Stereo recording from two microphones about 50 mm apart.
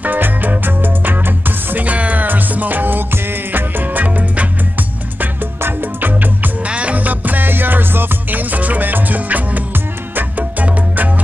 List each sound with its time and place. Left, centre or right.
0.0 s music: right
6.7 s music: right